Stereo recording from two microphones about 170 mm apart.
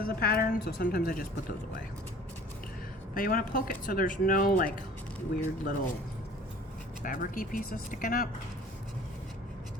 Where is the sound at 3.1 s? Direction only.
55° left (ahead or behind).